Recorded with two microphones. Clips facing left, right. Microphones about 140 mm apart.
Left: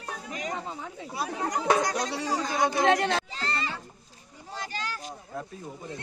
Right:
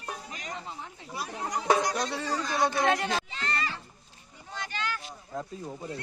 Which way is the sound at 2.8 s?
70° left (ahead or behind).